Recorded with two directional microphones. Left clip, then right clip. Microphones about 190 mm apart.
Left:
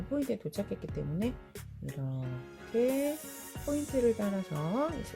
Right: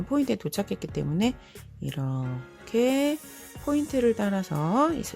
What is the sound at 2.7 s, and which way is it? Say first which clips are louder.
Speech: right 6 dB; 30° right (ahead or behind).